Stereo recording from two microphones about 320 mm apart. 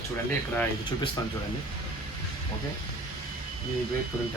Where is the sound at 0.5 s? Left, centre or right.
Centre.